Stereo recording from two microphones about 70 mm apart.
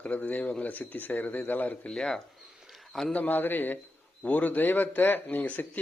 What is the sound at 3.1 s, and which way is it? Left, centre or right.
Speech, left.